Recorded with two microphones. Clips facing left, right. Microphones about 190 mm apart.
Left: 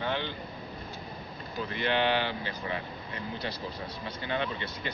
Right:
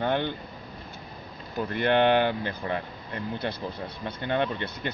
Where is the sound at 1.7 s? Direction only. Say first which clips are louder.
Right 6 dB; 55° right (ahead or behind).